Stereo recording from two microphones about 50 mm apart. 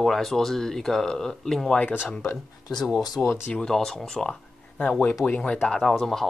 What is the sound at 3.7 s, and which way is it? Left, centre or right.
Speech, centre.